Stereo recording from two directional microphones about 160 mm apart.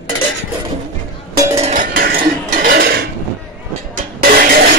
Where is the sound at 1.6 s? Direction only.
55° right (ahead or behind); by 3.1 s 80° right.